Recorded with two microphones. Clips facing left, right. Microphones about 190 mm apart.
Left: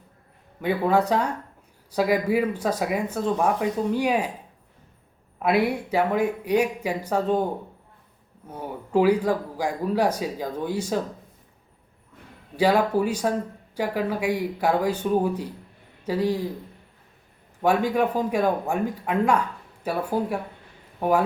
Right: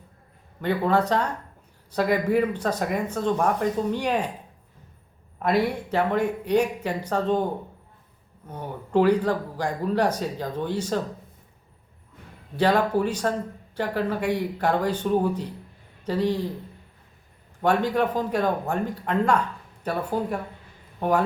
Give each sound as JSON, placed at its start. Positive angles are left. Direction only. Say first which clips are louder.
{"t": 0.6, "sound": "speech", "louder": "left 1 dB", "side_deg": 10}
{"t": 5.4, "sound": "speech", "louder": "left 1 dB", "side_deg": 10}
{"t": 8.4, "sound": "speech", "louder": "left 1 dB", "side_deg": 10}
{"t": 12.5, "sound": "speech", "louder": "left 1 dB", "side_deg": 10}
{"t": 17.6, "sound": "speech", "louder": "left 1 dB", "side_deg": 10}